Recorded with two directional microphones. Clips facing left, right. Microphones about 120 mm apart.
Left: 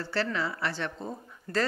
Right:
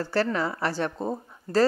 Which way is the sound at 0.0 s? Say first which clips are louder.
Right 5 dB; 45° right (ahead or behind).